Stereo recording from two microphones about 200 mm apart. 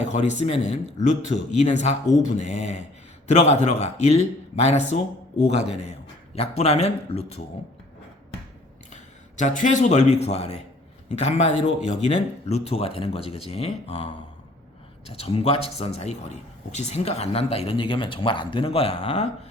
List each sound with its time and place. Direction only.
0.0 s speech: 35° left (ahead or behind)
6.3 s speech: 30° left (ahead or behind)
9.4 s a man's voice: 40° left (ahead or behind)